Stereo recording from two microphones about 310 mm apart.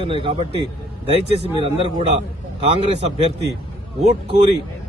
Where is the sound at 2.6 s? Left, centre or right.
Centre.